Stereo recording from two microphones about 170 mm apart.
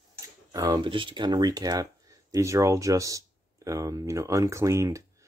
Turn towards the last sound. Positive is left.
turn(degrees=-20)  # may be behind; listen again after turning